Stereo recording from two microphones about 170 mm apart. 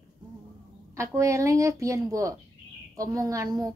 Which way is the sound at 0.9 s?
15° right (ahead or behind).